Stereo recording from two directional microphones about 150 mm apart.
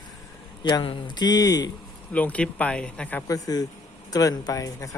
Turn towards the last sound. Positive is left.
turn(degrees=20)  # may be behind; listen again after turning